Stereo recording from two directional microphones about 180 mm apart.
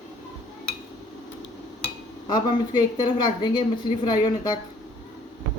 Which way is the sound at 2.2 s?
25° left (ahead or behind).